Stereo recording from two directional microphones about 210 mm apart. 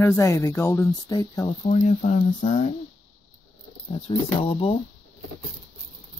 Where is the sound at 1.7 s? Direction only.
35° left (ahead or behind).